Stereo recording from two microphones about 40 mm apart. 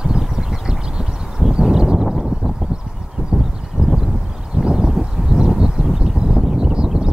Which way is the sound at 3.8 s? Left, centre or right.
Right.